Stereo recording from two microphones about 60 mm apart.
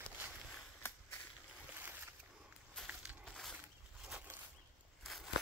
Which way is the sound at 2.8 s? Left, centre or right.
Centre.